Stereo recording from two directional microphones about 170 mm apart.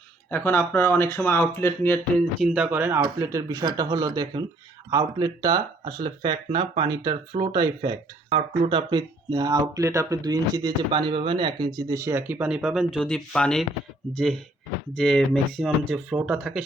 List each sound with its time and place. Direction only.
0.3 s speech: 10° left (ahead or behind)
2.4 s speech: 5° right (ahead or behind)